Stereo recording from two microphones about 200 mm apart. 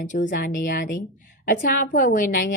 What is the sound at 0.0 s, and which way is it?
A woman's voice, 40° left (ahead or behind).